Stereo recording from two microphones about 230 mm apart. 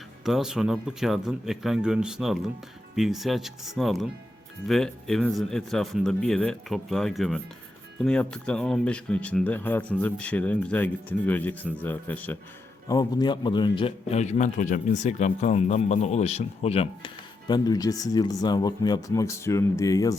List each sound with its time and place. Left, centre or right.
0.3 s a man's voice: centre